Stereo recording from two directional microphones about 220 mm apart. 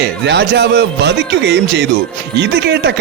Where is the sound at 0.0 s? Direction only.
50° right (ahead or behind).